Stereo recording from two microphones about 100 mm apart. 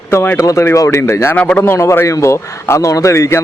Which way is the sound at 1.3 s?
10° left (ahead or behind).